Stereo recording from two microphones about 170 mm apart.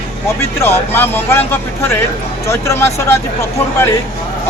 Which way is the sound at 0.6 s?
15° left (ahead or behind).